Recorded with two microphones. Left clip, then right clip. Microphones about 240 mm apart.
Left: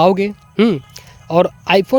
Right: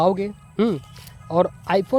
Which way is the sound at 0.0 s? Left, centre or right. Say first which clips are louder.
Left 7 dB; left.